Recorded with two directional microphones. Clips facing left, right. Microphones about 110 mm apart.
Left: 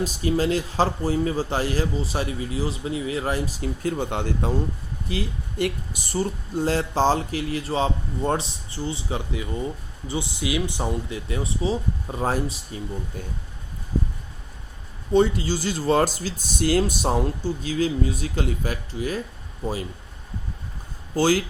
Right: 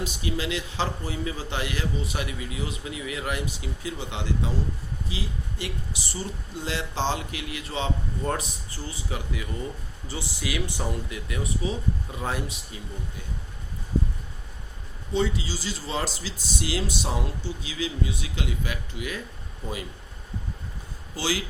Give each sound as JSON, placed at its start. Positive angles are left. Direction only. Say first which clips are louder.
{"t": 0.0, "sound": "speech", "louder": "left 7 dB", "side_deg": 40}
{"t": 15.1, "sound": "speech", "louder": "left 7 dB", "side_deg": 50}
{"t": 21.2, "sound": "speech", "louder": "left 9 dB", "side_deg": 45}